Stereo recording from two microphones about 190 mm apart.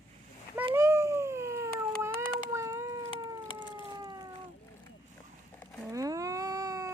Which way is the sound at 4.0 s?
20° right (ahead or behind).